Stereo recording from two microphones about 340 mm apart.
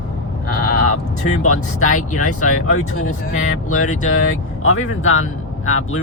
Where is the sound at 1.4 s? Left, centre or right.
Left.